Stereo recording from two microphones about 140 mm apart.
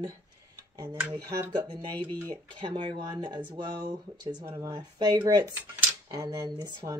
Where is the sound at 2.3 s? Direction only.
35° right (ahead or behind).